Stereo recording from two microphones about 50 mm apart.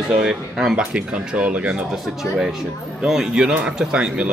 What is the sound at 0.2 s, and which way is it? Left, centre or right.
Speech, centre.